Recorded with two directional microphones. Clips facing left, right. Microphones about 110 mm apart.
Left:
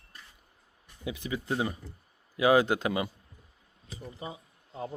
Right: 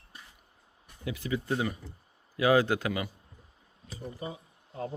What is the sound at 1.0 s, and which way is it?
Speech, 20° left (ahead or behind).